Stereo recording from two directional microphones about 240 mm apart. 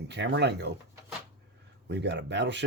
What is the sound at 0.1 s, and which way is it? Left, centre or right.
Speech, right.